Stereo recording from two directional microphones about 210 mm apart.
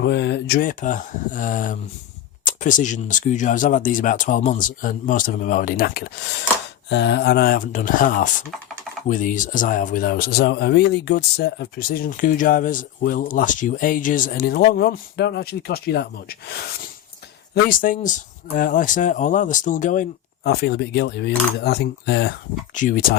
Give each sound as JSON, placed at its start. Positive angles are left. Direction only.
{"t": 0.0, "sound": "speech", "side_deg": 55}
{"t": 22.7, "sound": "speech", "side_deg": 40}